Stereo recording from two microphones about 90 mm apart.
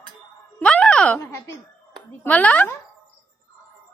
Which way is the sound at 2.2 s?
20° left (ahead or behind).